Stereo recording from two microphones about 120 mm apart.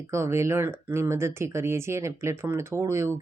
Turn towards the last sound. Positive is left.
turn(degrees=-20)  # may be behind; listen again after turning